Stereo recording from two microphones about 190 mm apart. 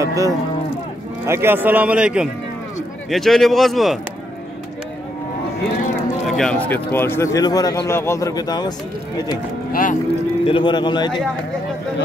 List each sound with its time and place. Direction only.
0.0 s a man's voice: 15° right (ahead or behind); by 4.0 s centre (ahead or behind)
6.2 s speech: 5° left (ahead or behind); by 8.7 s 20° left (ahead or behind)
9.7 s speech: 45° left (ahead or behind)
10.4 s speech: 25° left (ahead or behind)